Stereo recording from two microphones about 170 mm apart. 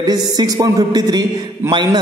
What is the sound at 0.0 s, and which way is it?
A man's voice, 25° right (ahead or behind).